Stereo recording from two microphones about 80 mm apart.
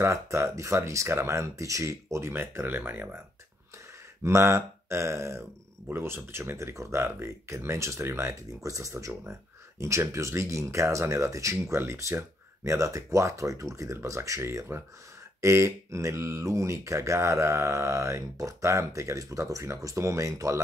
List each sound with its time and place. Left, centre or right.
0.0 s speech: right
4.2 s speech: right